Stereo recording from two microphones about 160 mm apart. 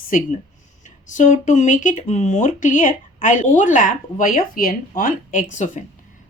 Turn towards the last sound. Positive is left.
turn(degrees=55)  # may be behind; listen again after turning